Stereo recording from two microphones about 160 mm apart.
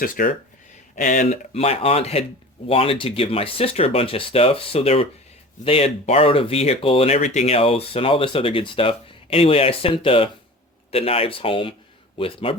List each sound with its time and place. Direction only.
0.2 s speech: 65° left (ahead or behind)
0.9 s speech: 50° left (ahead or behind); by 12.5 s 35° left (ahead or behind)